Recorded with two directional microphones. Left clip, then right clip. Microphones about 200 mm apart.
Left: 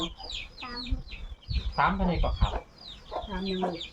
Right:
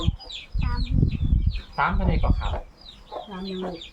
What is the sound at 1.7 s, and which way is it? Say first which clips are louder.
Speech: right 2 dB; 20° right (ahead or behind).